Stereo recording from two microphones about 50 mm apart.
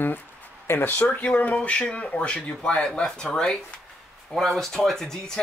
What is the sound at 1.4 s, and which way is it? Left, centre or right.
Speech, left.